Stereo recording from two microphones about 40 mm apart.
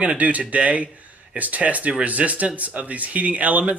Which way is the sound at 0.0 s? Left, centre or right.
Right.